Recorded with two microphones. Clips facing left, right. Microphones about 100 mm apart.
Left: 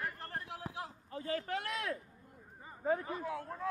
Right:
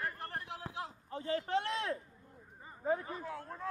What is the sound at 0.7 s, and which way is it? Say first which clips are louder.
Speech: right 1 dB; 25° right (ahead or behind).